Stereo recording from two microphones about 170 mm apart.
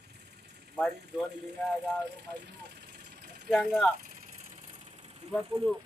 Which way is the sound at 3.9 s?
50° right (ahead or behind).